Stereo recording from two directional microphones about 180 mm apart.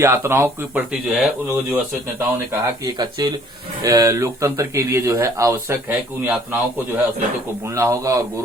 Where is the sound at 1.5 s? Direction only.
15° right (ahead or behind).